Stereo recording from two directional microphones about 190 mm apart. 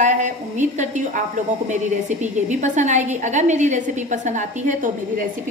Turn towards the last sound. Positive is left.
turn(degrees=-40)  # may be behind; listen again after turning